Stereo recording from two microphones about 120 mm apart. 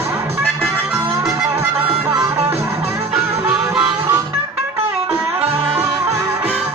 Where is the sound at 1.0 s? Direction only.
25° right (ahead or behind).